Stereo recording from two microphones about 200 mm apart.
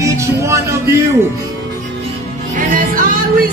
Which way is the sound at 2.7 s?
45° right (ahead or behind).